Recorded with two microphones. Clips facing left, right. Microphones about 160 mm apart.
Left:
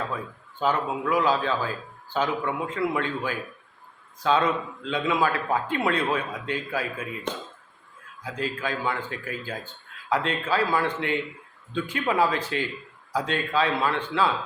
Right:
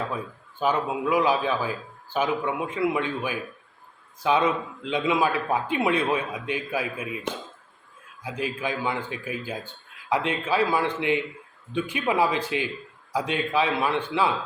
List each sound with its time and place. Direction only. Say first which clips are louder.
0.6 s speech: right 1 dB; 15° right (ahead or behind)